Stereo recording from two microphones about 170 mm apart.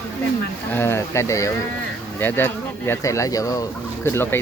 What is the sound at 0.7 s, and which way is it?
Speech, 15° left (ahead or behind).